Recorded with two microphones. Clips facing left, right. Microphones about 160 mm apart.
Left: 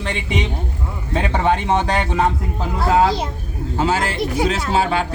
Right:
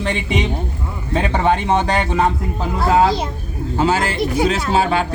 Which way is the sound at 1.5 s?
45° right (ahead or behind).